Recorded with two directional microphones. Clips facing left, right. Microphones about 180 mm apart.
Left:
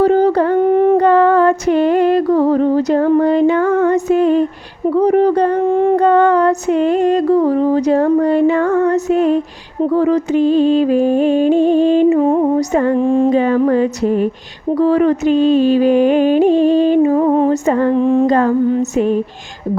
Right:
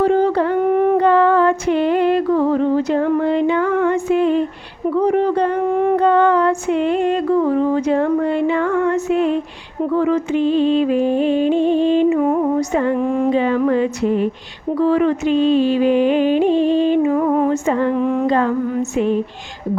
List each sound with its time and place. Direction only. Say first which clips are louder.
0.0 s a sound: left 3 dB; 40° left (ahead or behind)
0.9 s music: left 3 dB; 45° left (ahead or behind)
4.9 s a sound: left 4 dB; 40° left (ahead or behind)
5.6 s a sound: left 3 dB; 30° left (ahead or behind)
6.0 s female singing: left 3 dB; 45° left (ahead or behind)
9.8 s music: left 3 dB; 35° left (ahead or behind)
12.7 s music: left 4 dB; 40° left (ahead or behind)
13.0 s humming: left 4 dB; 30° left (ahead or behind)
13.3 s a sound: left 3 dB; 40° left (ahead or behind)
14.8 s music: left 3 dB; 40° left (ahead or behind)
17.9 s humming: left 5 dB; 30° left (ahead or behind)
18.3 s music: left 3 dB; 45° left (ahead or behind)
18.6 s female singing: left 6 dB; 30° left (ahead or behind)
18.9 s music: even; 45° left (ahead or behind)